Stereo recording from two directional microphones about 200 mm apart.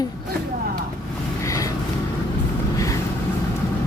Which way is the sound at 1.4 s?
15° left (ahead or behind).